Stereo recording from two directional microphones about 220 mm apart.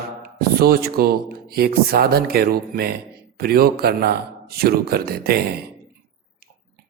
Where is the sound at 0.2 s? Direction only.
45° right (ahead or behind).